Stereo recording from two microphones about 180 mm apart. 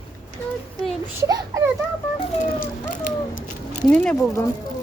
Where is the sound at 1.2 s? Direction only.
15° right (ahead or behind).